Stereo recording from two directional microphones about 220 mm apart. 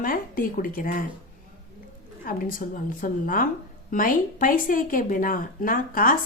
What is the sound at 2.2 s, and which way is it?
Speech, 40° left (ahead or behind).